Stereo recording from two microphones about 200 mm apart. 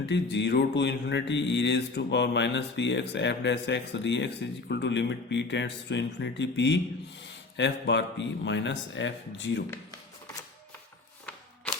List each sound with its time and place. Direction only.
0.0 s mantra: 60° left (ahead or behind)